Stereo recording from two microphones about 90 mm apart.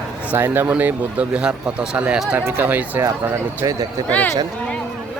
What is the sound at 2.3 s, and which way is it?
Speech, 20° right (ahead or behind).